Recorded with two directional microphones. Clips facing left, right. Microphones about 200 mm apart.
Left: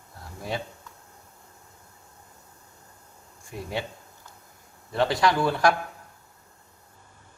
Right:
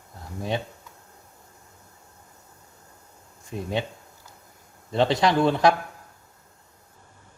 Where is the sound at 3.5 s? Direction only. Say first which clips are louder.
Right 4 dB; 20° right (ahead or behind).